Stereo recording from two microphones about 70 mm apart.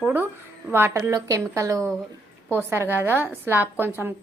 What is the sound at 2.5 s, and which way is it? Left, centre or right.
A woman's voice, right.